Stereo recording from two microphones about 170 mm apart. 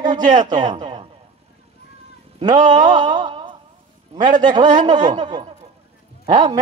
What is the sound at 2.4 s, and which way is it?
Speech, 50° right (ahead or behind).